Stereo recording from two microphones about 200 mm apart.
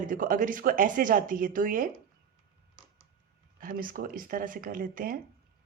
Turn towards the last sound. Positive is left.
turn(degrees=-45)  # may be behind; listen again after turning